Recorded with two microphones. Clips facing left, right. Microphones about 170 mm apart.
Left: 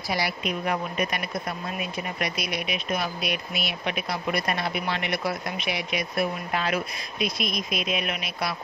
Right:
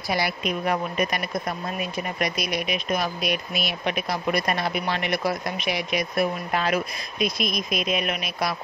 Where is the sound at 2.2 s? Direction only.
45° right (ahead or behind).